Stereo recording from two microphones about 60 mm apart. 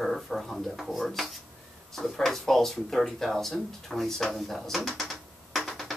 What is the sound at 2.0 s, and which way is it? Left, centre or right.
Speech, centre.